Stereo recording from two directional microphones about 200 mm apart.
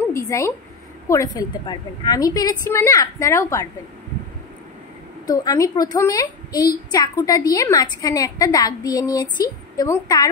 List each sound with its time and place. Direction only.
0.3 s a woman's voice: 15° left (ahead or behind)
5.2 s a woman's voice: 20° left (ahead or behind)